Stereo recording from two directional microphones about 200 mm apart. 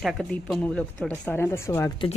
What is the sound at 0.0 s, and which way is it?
Speech, centre (ahead or behind).